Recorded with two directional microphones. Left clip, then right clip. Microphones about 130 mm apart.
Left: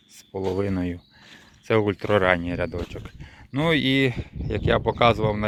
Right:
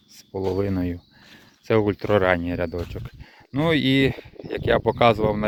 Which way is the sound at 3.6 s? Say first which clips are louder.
Right 1 dB; 30° right (ahead or behind).